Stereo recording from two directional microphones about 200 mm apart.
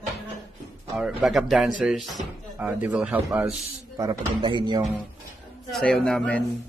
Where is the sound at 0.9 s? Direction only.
Centre (ahead or behind).